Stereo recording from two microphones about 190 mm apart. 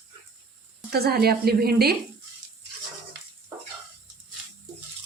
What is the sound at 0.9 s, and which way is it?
Speech, 55° right (ahead or behind).